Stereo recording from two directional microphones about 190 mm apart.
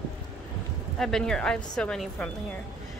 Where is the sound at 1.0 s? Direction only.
5° left (ahead or behind).